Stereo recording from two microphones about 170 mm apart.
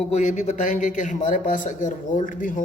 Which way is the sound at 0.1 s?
45° left (ahead or behind).